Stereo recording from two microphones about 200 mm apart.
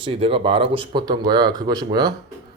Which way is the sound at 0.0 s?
30° right (ahead or behind).